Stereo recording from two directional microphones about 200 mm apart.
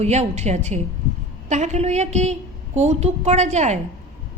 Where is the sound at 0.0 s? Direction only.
35° right (ahead or behind).